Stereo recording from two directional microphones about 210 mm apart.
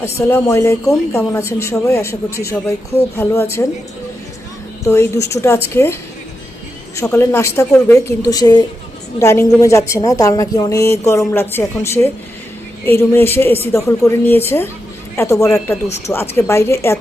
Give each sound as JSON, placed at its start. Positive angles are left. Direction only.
{"t": 0.0, "sound": "a woman's voice", "side_deg": 10}
{"t": 5.2, "sound": "a woman's voice", "side_deg": 15}
{"t": 15.5, "sound": "speech", "side_deg": 0}
{"t": 15.9, "sound": "a woman's voice", "side_deg": 10}